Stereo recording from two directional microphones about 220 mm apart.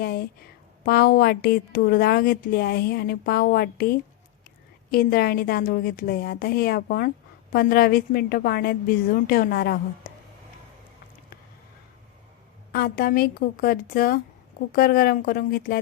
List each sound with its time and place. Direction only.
0.0 s a woman's voice: 45° left (ahead or behind)
12.7 s a woman's voice: 45° left (ahead or behind)